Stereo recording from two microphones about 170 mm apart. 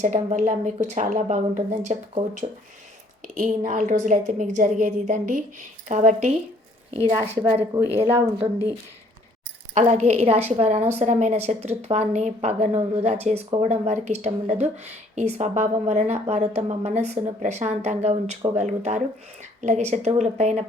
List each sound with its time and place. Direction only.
0.0 s a woman's voice: 45° right (ahead or behind)
3.2 s a woman's voice: 50° right (ahead or behind)
7.8 s speech: 15° right (ahead or behind)
9.7 s speech: 40° right (ahead or behind)